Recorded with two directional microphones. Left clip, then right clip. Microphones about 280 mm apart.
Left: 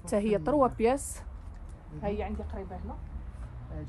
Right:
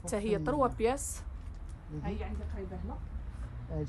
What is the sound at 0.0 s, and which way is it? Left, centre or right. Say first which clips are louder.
A woman's voice: left 4 dB; left.